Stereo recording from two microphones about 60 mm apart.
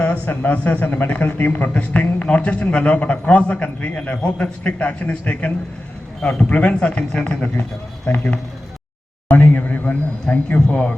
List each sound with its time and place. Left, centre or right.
0.0 s a man's voice: left
9.3 s a man's voice: left